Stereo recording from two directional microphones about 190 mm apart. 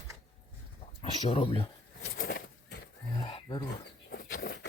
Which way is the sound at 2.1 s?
55° left (ahead or behind).